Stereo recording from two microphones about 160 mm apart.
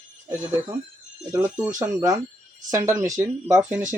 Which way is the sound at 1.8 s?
15° right (ahead or behind).